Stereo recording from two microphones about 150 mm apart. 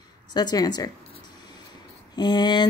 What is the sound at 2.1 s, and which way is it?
Speech, 30° left (ahead or behind).